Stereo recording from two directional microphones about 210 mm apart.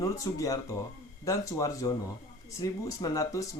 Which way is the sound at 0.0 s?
15° left (ahead or behind).